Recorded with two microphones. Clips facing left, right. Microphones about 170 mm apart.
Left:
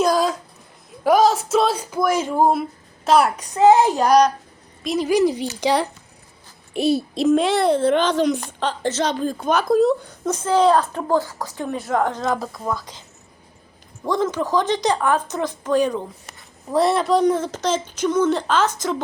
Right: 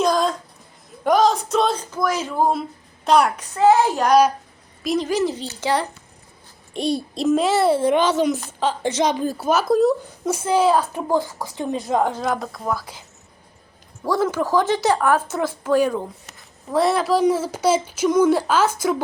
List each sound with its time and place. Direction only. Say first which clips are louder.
0.0 s a sound: left 1 dB; 5° left (ahead or behind)
1.0 s music: left 1 dB; 5° left (ahead or behind)
3.0 s a child's voice: even; centre (ahead or behind)
3.5 s music: left 2 dB; 20° left (ahead or behind)
4.8 s a woman's voice: right 1 dB; centre (ahead or behind)
5.0 s music: left 4 dB; 15° left (ahead or behind)
6.7 s a child's voice: left 3 dB; 5° left (ahead or behind)
14.0 s speech: right 1 dB; 5° right (ahead or behind)